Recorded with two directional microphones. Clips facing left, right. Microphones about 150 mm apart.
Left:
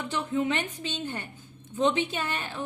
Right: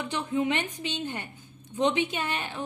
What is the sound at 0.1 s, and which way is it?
A woman's voice, 15° right (ahead or behind).